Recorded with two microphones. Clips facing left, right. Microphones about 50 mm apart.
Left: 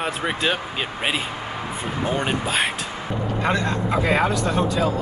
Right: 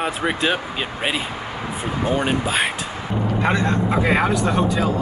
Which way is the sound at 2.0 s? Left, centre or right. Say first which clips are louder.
Right 3 dB; centre.